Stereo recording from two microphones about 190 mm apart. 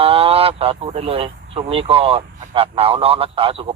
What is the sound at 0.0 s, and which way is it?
Speech, 30° right (ahead or behind).